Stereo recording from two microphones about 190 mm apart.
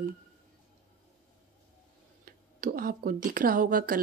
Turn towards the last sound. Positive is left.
turn(degrees=-50)  # may be behind; listen again after turning